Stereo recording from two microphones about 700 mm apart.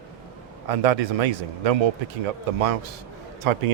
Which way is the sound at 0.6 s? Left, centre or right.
Right.